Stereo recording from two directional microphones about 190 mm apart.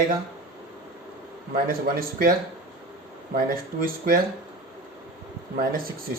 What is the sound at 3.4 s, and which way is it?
Speech, 50° right (ahead or behind).